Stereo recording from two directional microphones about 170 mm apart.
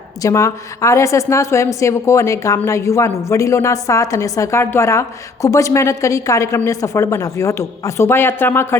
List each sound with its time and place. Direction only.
0.2 s a woman's voice: 15° left (ahead or behind)